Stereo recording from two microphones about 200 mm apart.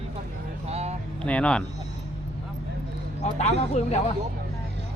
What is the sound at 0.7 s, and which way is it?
Music, 30° right (ahead or behind).